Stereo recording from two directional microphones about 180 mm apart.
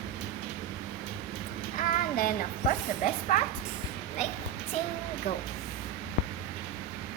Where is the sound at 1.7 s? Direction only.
50° left (ahead or behind).